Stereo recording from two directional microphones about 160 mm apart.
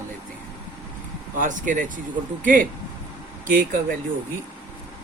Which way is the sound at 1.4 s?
55° right (ahead or behind).